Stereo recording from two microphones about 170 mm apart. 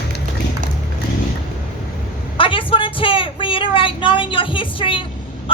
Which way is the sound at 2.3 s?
30° left (ahead or behind).